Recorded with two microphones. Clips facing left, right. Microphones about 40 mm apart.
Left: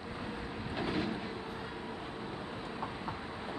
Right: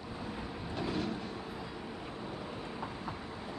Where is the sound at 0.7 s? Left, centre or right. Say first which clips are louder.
Left 1 dB; left.